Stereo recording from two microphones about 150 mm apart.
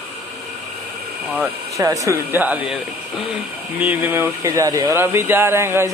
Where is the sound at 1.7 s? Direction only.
20° right (ahead or behind).